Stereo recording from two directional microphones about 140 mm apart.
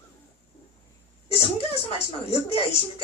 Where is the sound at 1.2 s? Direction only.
45° left (ahead or behind).